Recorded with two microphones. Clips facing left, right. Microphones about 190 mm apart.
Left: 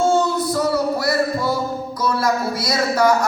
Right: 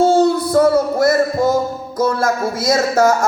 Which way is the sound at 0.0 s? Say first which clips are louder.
Right 5 dB; 35° right (ahead or behind).